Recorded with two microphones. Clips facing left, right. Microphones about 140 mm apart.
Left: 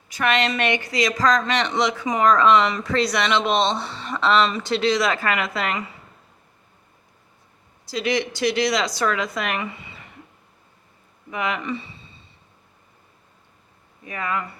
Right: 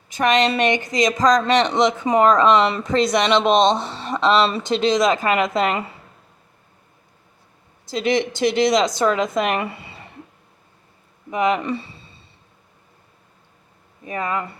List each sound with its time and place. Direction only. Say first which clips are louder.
0.1 s a woman's voice: right 4 dB; 20° right (ahead or behind)
2.0 s a woman's voice: right 2 dB; 35° right (ahead or behind)
3.9 s speech: right 2 dB; 35° right (ahead or behind)
4.6 s a woman's voice: right 3 dB; 20° right (ahead or behind)
7.9 s a woman's voice: right 3 dB; 20° right (ahead or behind)
9.6 s a sound: right 4 dB; 35° right (ahead or behind)
11.3 s a woman's voice: right 7 dB; 20° right (ahead or behind)
11.6 s speech: right 3 dB; 35° right (ahead or behind)
14.0 s a woman's voice: right 3 dB; 30° right (ahead or behind)